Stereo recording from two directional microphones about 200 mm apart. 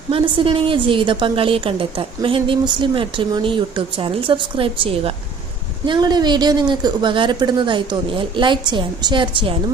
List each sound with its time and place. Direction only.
0.1 s a woman's voice: 25° right (ahead or behind)